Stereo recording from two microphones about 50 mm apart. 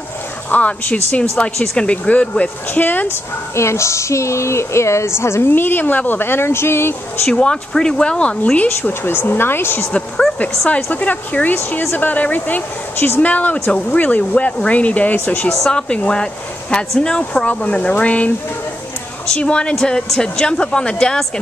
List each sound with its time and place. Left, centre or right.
0.5 s speech: left
2.7 s speech: left
3.1 s speech: left
5.5 s speech: left
7.2 s speech: centre
9.0 s speech: left
10.9 s speech: left
11.8 s speech: left
12.1 s speech: left
13.2 s speech: left
15.7 s a woman's voice: centre
19.3 s a woman's voice: centre